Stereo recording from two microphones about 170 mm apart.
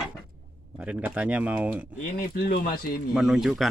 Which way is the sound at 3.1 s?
Centre (ahead or behind).